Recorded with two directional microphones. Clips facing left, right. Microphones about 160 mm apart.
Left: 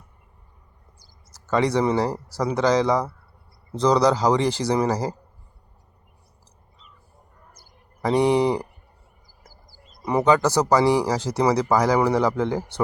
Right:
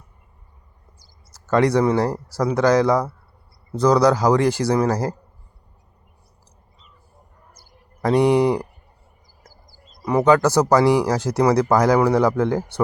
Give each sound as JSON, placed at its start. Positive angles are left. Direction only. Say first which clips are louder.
{"t": 0.9, "sound": "a sound", "louder": "right 1 dB", "side_deg": 10}
{"t": 1.8, "sound": "speech", "louder": "right 3 dB", "side_deg": 10}
{"t": 4.3, "sound": "speech", "louder": "right 3 dB", "side_deg": -10}
{"t": 4.8, "sound": "speech", "louder": "right 2 dB", "side_deg": 10}
{"t": 8.0, "sound": "speech", "louder": "right 3 dB", "side_deg": 15}
{"t": 8.3, "sound": "speech", "louder": "right 2 dB", "side_deg": -10}
{"t": 10.1, "sound": "speech", "louder": "right 3 dB", "side_deg": 10}